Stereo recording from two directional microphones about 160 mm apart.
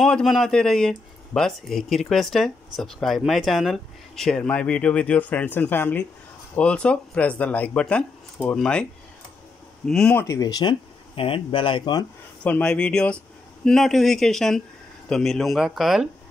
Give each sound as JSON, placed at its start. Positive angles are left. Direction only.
{"t": 0.0, "sound": "speech", "side_deg": 0}
{"t": 9.8, "sound": "speech", "side_deg": 5}
{"t": 10.2, "sound": "speech", "side_deg": 20}
{"t": 12.4, "sound": "speech", "side_deg": 10}